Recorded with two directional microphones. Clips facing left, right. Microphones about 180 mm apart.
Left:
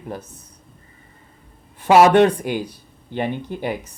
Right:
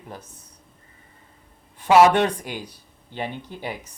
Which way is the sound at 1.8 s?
55° left (ahead or behind).